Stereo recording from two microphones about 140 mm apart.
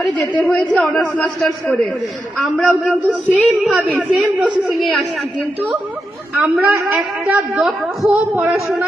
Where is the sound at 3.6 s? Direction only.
5° right (ahead or behind).